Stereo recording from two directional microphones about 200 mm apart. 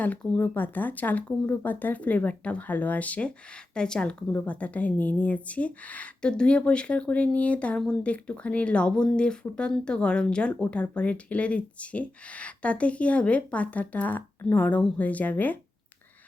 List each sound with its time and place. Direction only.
0.0 s a woman's voice: 10° left (ahead or behind)